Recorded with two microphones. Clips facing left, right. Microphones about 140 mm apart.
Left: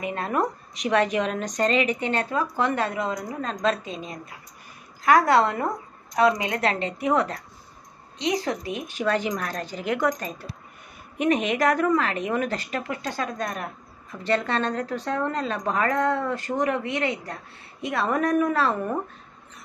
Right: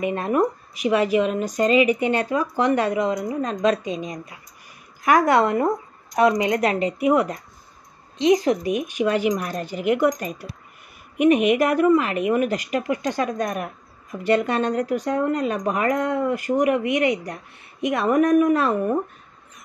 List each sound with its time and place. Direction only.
0.0 s a woman's voice: 20° right (ahead or behind)
0.7 s a woman's voice: 5° right (ahead or behind)